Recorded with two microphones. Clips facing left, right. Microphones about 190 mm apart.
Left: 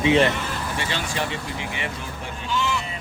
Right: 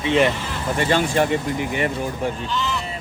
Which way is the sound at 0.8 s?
50° right (ahead or behind).